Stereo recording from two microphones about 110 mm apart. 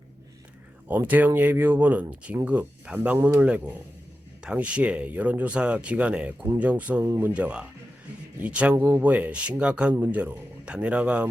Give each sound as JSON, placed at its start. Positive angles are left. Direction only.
{"t": 0.9, "sound": "speech", "side_deg": -15}
{"t": 7.0, "sound": "speech", "side_deg": -25}